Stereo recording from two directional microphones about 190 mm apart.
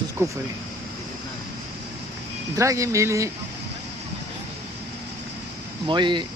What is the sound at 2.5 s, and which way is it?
Speech, 15° right (ahead or behind).